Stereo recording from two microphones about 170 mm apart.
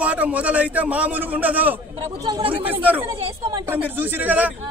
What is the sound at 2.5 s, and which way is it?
Speech, 10° right (ahead or behind).